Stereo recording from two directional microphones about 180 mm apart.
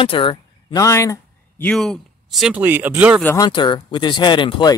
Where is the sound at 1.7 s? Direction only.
Centre (ahead or behind).